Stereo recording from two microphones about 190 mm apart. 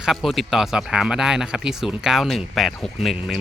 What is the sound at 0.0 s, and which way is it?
Speech, centre (ahead or behind).